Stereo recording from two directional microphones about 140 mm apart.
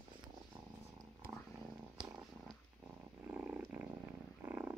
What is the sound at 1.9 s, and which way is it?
Purr, 5° right (ahead or behind).